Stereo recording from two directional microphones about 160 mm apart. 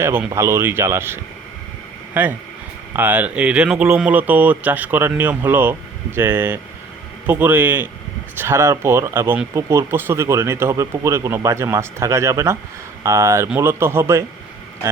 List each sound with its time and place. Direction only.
0.0 s speech: 15° right (ahead or behind)